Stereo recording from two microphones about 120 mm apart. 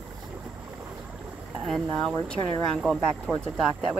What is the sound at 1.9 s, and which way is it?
Speech, 5° left (ahead or behind).